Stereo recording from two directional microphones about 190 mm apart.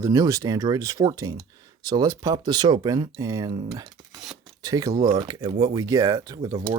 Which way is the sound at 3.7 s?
15° right (ahead or behind).